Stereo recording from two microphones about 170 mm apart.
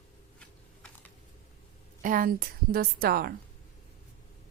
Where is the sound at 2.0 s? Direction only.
55° right (ahead or behind).